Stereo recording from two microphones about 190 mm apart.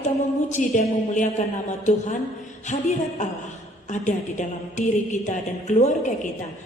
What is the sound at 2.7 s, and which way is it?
A woman's voice, 40° left (ahead or behind).